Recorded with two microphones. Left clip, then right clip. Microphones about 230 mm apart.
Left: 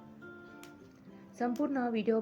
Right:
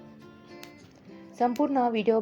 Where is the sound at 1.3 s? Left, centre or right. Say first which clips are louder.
Right 9 dB; centre.